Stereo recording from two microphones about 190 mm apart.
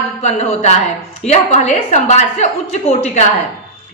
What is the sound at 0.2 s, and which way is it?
A woman's voice, 35° left (ahead or behind).